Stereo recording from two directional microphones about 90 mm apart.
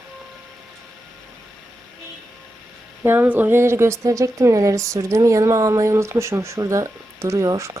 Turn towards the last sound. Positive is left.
turn(degrees=-35)  # may be behind; listen again after turning